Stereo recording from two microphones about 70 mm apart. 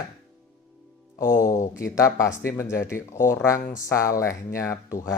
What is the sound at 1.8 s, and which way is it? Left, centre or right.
Speech, left.